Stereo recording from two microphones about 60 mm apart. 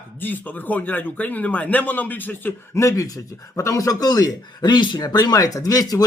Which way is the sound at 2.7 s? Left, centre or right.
Left.